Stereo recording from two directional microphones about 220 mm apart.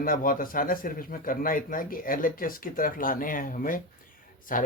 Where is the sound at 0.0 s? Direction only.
40° left (ahead or behind).